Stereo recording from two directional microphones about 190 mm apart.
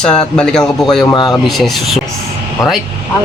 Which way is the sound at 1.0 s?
20° left (ahead or behind).